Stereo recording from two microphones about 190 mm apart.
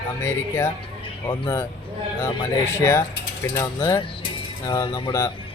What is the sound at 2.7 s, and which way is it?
Speech, 15° left (ahead or behind).